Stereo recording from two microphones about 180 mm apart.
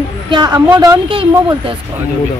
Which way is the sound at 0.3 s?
25° right (ahead or behind).